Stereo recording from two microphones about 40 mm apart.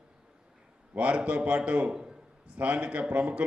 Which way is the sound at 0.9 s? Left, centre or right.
Right.